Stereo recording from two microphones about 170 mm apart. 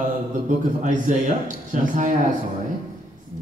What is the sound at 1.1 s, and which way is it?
A man's voice, 50° right (ahead or behind).